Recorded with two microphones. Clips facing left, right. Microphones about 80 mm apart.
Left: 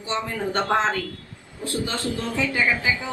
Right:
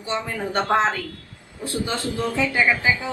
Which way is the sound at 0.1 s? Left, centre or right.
Right.